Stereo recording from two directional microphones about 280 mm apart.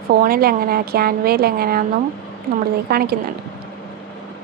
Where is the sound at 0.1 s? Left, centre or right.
Right.